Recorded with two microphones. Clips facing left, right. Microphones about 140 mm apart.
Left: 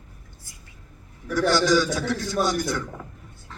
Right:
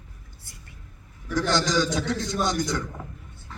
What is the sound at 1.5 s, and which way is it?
Speech, 20° right (ahead or behind).